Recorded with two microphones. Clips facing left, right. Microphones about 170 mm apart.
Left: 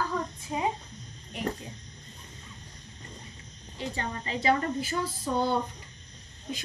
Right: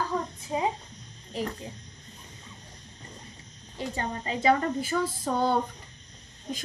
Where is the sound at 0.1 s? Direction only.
25° right (ahead or behind).